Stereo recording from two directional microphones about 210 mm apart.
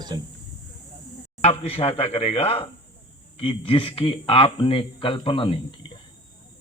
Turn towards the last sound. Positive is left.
turn(degrees=25)  # may be behind; listen again after turning